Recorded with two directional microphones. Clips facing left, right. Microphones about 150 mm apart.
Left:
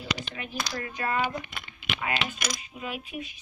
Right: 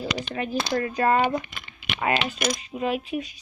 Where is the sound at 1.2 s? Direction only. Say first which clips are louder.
Right 6 dB; 60° right (ahead or behind).